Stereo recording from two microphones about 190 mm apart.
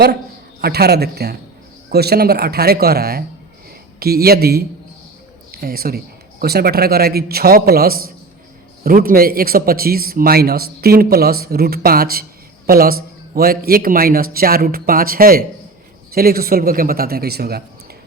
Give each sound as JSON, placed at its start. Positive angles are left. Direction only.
{"t": 0.6, "sound": "a man's voice", "side_deg": -55}